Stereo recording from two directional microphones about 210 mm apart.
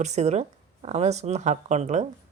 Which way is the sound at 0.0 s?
30° right (ahead or behind).